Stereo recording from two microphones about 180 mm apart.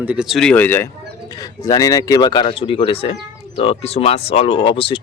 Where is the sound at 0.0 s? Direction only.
5° right (ahead or behind).